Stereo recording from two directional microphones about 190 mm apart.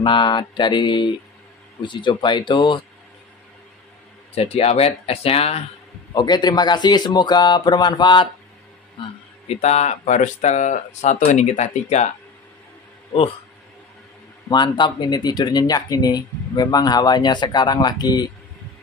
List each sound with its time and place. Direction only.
0.0 s speech: 25° left (ahead or behind)
4.4 s speech: 30° left (ahead or behind)
14.5 s speech: 25° left (ahead or behind)